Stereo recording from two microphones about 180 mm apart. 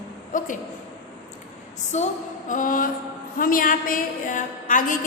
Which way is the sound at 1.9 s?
40° left (ahead or behind).